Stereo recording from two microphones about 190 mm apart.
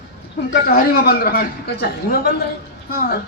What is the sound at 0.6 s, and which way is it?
A man's voice, 55° left (ahead or behind).